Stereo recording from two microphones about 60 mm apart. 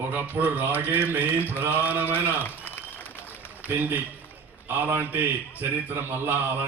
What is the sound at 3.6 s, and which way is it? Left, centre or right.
A man's voice, right.